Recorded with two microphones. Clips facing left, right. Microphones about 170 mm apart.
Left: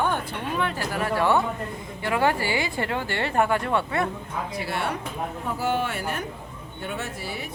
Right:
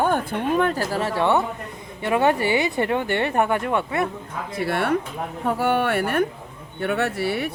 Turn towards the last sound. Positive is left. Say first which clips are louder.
# right 10 dB
turn(degrees=-65)  # may be behind; listen again after turning